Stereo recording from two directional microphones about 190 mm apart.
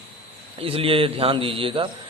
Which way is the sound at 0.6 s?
30° right (ahead or behind).